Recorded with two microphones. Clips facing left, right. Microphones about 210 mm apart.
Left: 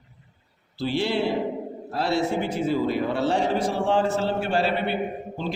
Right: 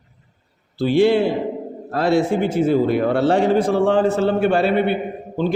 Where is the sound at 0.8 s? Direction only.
55° right (ahead or behind).